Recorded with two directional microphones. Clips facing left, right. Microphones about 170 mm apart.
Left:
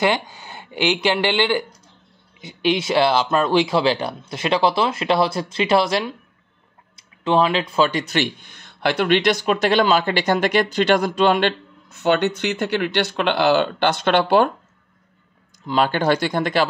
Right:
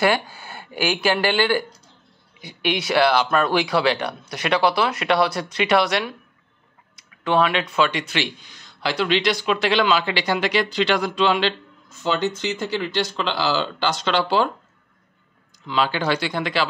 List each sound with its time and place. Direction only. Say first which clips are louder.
0.0 s speech: even; 20° left (ahead or behind); by 14.5 s 55° left (ahead or behind)
15.6 s speech: left 3 dB; 45° left (ahead or behind)